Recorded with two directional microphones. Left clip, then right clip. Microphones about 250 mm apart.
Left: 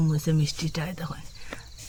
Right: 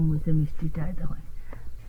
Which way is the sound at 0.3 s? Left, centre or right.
Left.